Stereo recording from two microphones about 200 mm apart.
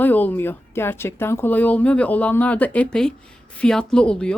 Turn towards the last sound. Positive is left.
turn(degrees=5)  # may be behind; listen again after turning